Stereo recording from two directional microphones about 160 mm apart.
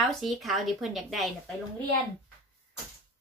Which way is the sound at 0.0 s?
Centre (ahead or behind).